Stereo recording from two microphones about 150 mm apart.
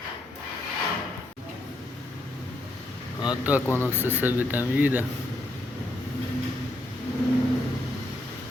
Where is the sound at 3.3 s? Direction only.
10° right (ahead or behind).